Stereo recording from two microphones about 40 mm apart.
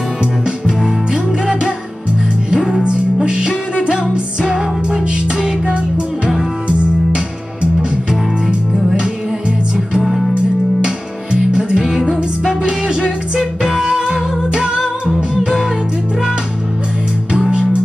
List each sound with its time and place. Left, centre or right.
0.2 s music: centre
7.6 s music: right
9.9 s music: centre
11.3 s music: centre
14.8 s music: centre
17.3 s music: right